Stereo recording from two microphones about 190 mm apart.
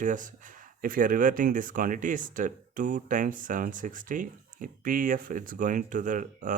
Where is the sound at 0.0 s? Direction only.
45° right (ahead or behind).